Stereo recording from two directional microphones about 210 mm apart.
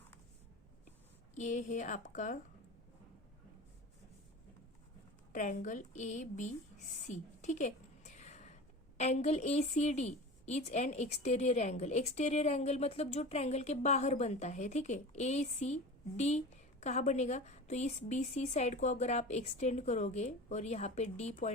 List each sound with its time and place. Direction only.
1.4 s a woman's voice: 35° left (ahead or behind)
5.3 s a woman's voice: 35° left (ahead or behind)